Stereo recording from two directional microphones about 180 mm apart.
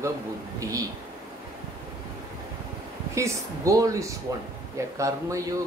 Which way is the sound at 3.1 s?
15° right (ahead or behind).